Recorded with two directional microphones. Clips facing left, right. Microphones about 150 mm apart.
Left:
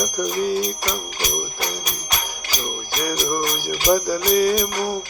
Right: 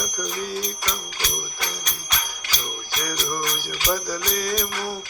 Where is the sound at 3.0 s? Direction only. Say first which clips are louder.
Left 6 dB; 15° left (ahead or behind).